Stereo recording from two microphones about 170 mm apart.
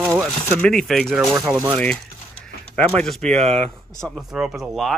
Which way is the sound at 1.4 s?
15° right (ahead or behind).